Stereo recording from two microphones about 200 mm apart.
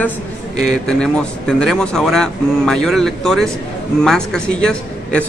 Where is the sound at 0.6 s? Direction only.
5° left (ahead or behind).